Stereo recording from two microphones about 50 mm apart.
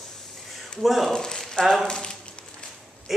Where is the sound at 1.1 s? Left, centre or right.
Centre.